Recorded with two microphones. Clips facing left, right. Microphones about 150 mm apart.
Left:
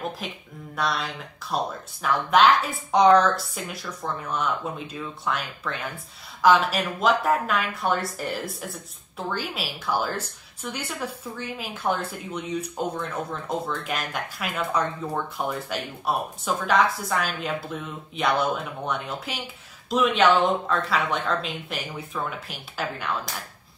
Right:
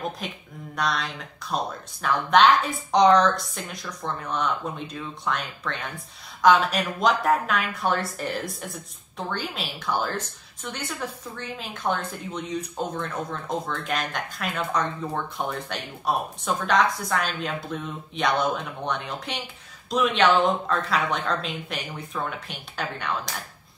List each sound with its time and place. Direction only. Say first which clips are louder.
0.2 s speech: even; centre (ahead or behind)